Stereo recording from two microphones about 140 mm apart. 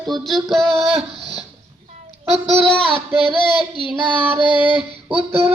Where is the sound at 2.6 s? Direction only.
35° left (ahead or behind).